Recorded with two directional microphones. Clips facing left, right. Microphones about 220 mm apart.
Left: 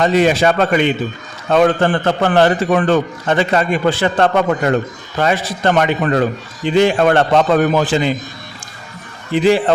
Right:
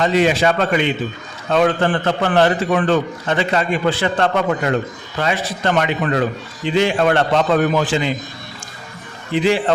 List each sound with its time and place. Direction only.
0.0 s a man's voice: 45° left (ahead or behind)
9.3 s a man's voice: 40° left (ahead or behind)